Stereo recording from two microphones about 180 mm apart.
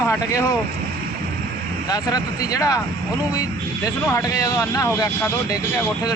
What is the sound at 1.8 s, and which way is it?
Speech, 20° left (ahead or behind).